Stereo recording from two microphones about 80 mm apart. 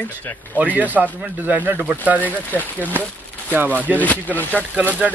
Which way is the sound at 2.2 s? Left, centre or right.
Left.